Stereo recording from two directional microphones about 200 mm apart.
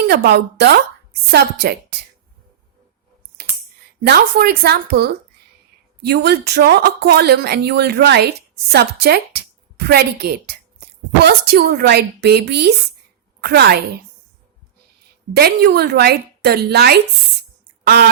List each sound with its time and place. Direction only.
0.0 s speech: 55° right (ahead or behind)
4.0 s speech: 50° right (ahead or behind)
15.3 s speech: 50° right (ahead or behind)